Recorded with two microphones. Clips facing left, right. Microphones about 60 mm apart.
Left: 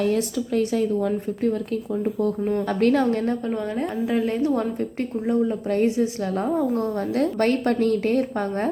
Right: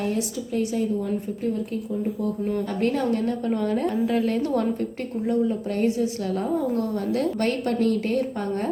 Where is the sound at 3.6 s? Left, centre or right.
Centre.